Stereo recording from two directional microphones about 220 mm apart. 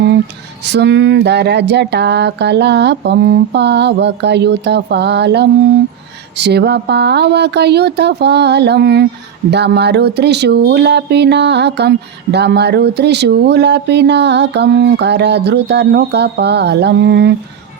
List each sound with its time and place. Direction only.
0.7 s speech: 50° right (ahead or behind)